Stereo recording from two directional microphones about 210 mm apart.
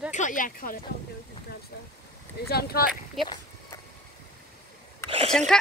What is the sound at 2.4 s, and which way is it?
Speech, 45° left (ahead or behind).